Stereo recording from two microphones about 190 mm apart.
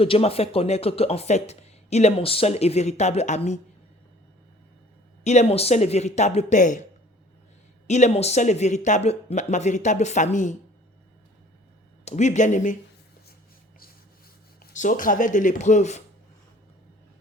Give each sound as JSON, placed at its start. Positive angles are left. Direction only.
{"t": 0.0, "sound": "speech", "side_deg": 30}
{"t": 5.2, "sound": "speech", "side_deg": 35}
{"t": 7.9, "sound": "speech", "side_deg": 35}
{"t": 12.0, "sound": "speech", "side_deg": 40}
{"t": 14.6, "sound": "speech", "side_deg": 45}